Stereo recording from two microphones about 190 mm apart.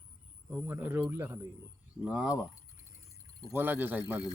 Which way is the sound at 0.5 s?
10° right (ahead or behind).